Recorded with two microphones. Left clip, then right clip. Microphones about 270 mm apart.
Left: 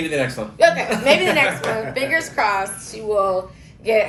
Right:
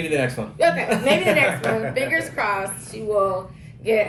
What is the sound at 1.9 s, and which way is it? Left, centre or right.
Speech, centre.